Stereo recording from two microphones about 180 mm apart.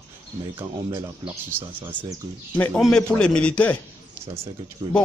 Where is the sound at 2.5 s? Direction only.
5° left (ahead or behind).